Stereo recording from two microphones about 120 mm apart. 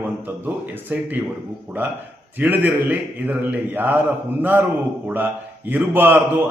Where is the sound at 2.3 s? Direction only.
15° right (ahead or behind).